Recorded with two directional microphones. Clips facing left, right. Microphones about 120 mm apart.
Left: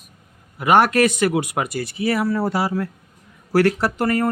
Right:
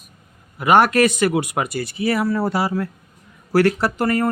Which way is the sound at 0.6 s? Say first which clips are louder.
Right 1 dB; 50° right (ahead or behind).